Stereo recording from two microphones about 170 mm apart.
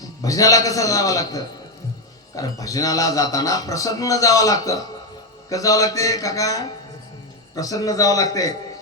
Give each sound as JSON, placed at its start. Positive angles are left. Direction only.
{"t": 0.2, "sound": "speech", "side_deg": 20}